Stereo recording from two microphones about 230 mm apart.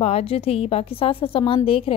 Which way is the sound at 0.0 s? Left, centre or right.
Left.